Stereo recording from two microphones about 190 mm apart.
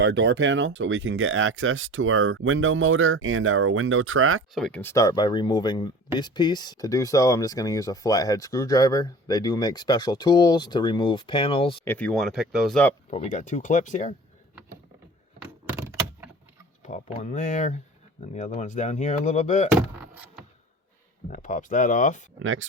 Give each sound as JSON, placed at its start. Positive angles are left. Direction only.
{"t": 0.0, "sound": "speech", "side_deg": -75}
{"t": 4.5, "sound": "speech", "side_deg": 5}
{"t": 11.9, "sound": "speech", "side_deg": 5}
{"t": 13.1, "sound": "speech", "side_deg": 35}
{"t": 16.8, "sound": "speech", "side_deg": 40}
{"t": 21.2, "sound": "speech", "side_deg": 40}
{"t": 22.4, "sound": "speech", "side_deg": -90}